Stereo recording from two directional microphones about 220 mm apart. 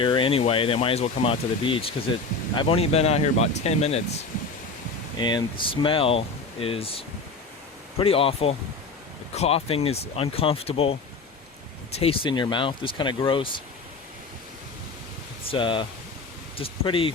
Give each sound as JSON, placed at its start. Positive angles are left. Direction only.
{"t": 0.0, "sound": "speech", "side_deg": 20}
{"t": 5.2, "sound": "speech", "side_deg": 20}
{"t": 7.9, "sound": "speech", "side_deg": 25}
{"t": 11.9, "sound": "speech", "side_deg": 25}
{"t": 15.4, "sound": "speech", "side_deg": 20}